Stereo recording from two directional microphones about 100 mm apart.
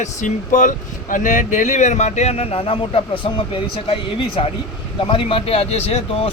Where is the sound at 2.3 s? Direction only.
85° left; by 3.5 s 55° left (ahead or behind).